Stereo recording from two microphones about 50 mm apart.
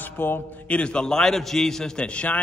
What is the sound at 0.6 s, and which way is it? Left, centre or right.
A man's voice, left.